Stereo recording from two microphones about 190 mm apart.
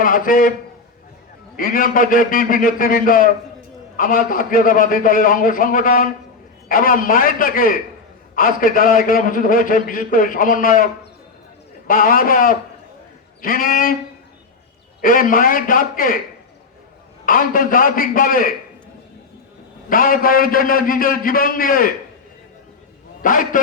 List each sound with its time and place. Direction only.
0.0 s a man's voice: 45° left (ahead or behind)
1.5 s a man's voice: 45° left (ahead or behind)
11.9 s a man's voice: 45° left (ahead or behind)
15.0 s a man's voice: 45° left (ahead or behind)
17.2 s a man's voice: 45° left (ahead or behind)
19.9 s a man's voice: 45° left (ahead or behind)
23.2 s a man's voice: 45° left (ahead or behind)